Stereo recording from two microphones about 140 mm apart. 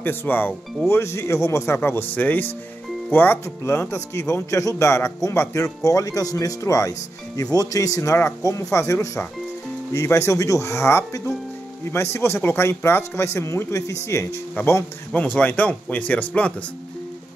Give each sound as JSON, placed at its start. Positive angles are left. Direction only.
{"t": 0.0, "sound": "speech", "side_deg": 15}